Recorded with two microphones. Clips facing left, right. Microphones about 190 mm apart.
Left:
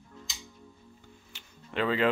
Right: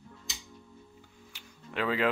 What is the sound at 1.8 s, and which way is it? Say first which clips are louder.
Speech: left 2 dB; 5° right (ahead or behind).